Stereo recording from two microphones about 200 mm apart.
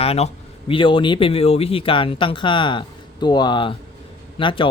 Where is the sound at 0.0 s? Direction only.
30° left (ahead or behind).